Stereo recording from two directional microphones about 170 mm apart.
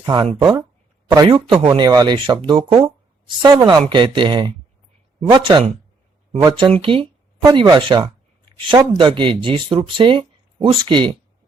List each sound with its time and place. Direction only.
0.0 s speech: 25° right (ahead or behind)